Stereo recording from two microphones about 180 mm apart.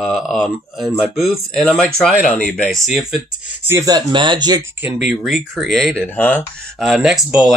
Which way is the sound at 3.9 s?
25° right (ahead or behind).